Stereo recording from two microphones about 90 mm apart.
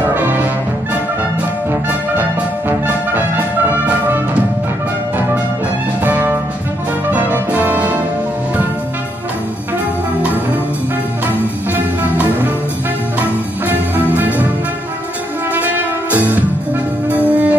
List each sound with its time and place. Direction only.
0.1 s music: 20° right (ahead or behind)
3.1 s music: 20° right (ahead or behind)
6.0 s music: 20° right (ahead or behind)
11.7 s music: 20° right (ahead or behind)
15.5 s music: 20° right (ahead or behind)